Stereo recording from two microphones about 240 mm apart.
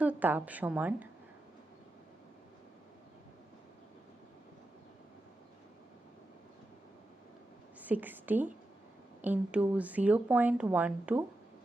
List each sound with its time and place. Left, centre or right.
0.0 s a woman's voice: centre
7.8 s a woman's voice: centre